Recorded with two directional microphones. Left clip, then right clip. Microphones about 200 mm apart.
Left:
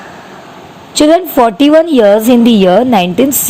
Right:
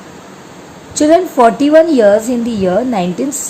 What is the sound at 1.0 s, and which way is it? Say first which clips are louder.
A woman's voice: left 1 dB; 25° left (ahead or behind).